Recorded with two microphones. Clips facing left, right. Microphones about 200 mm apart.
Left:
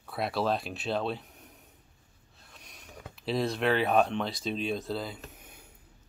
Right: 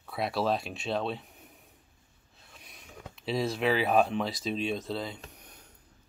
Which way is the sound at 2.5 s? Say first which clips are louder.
Even; centre (ahead or behind).